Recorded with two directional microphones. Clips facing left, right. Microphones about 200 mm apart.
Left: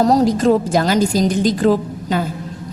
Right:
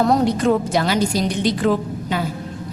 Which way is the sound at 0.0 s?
35° left (ahead or behind).